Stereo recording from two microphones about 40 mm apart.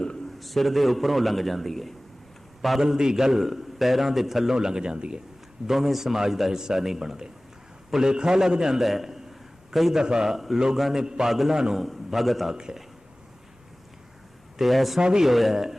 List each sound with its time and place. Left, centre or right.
0.3 s a man's voice: centre
2.8 s a man's voice: centre
4.5 s speech: centre
5.6 s a man's voice: centre
8.8 s a man's voice: centre
10.0 s speech: centre
10.3 s a man's voice: centre
11.0 s speech: centre
11.3 s a man's voice: centre
11.5 s a man's voice: centre
11.8 s a man's voice: centre
14.6 s a man's voice: centre
15.0 s speech: centre
15.3 s a man's voice: centre